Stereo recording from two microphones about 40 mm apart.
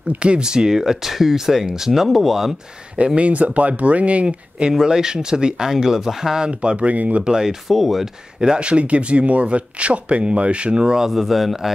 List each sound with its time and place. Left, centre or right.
0.2 s speech: right; by 2.5 s centre
3.2 s speech: right
4.3 s speech: right
6.4 s speech: right
7.2 s speech: centre
7.6 s speech: centre
8.4 s speech: right
11.1 s speech: centre